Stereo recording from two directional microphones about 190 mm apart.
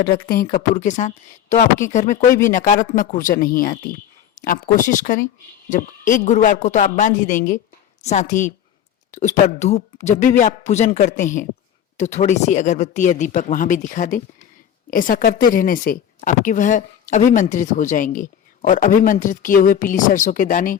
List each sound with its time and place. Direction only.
0.0 s a woman's voice: 55° left (ahead or behind)